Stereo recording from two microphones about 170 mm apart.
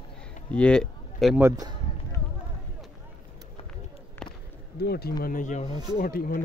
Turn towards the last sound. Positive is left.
turn(degrees=60)  # may be behind; listen again after turning